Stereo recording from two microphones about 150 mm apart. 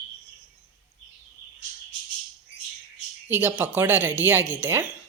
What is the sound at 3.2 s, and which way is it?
Speech, 15° right (ahead or behind).